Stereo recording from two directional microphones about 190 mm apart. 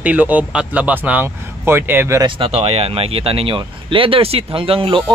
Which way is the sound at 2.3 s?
30° right (ahead or behind).